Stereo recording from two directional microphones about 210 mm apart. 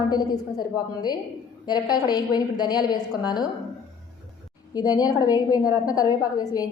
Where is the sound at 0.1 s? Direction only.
20° left (ahead or behind).